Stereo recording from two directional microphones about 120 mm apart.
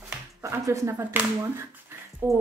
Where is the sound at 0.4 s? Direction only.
25° right (ahead or behind).